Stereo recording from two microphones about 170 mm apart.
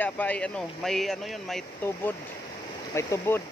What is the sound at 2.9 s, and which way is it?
Speech, 15° left (ahead or behind).